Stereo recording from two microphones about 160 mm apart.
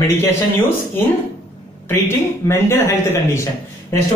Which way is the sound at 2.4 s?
15° left (ahead or behind).